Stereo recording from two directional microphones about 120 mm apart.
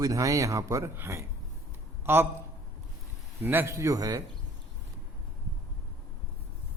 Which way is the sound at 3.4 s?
20° right (ahead or behind).